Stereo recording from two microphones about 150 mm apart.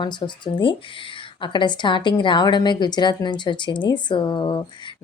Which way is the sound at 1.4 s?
30° left (ahead or behind).